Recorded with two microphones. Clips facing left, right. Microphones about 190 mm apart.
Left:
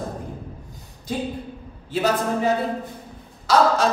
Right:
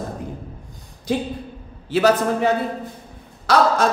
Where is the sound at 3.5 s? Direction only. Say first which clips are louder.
Right 1 dB; 65° right (ahead or behind).